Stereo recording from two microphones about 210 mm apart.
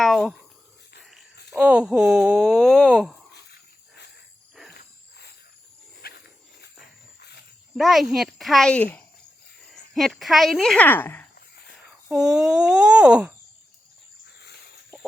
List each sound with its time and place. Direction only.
0.0 s speech: centre (ahead or behind)
1.5 s speech: 5° right (ahead or behind)
4.7 s cricket: 50° left (ahead or behind)
6.0 s wild animals: 50° left (ahead or behind)
7.8 s speech: centre (ahead or behind)
12.0 s speech: 5° right (ahead or behind)